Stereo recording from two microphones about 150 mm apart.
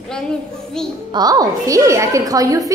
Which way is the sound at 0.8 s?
5° left (ahead or behind).